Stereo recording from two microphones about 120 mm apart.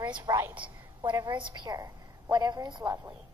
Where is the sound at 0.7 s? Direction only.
15° right (ahead or behind).